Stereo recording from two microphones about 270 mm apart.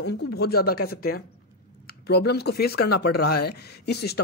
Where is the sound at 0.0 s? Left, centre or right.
Left.